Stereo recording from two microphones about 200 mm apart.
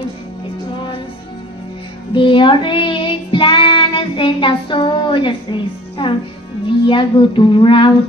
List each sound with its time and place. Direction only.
2.1 s child singing: 25° left (ahead or behind)